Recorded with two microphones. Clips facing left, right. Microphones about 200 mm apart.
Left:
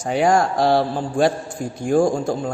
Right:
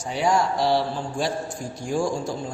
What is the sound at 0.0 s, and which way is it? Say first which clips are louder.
A man's voice: left 5 dB; 50° left (ahead or behind).